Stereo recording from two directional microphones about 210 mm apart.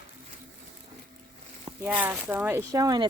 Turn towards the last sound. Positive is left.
turn(degrees=-20)  # may be behind; listen again after turning